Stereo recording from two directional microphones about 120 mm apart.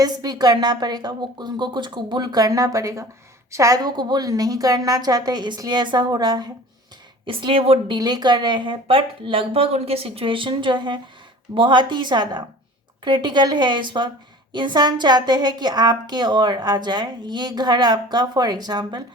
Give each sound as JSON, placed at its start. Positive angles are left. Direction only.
{"t": 0.0, "sound": "a woman's voice", "side_deg": -30}
{"t": 7.3, "sound": "speech", "side_deg": -50}
{"t": 7.9, "sound": "a woman's voice", "side_deg": -35}